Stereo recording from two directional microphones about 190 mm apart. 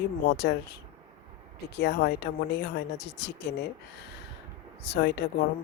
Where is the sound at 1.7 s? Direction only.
60° left (ahead or behind).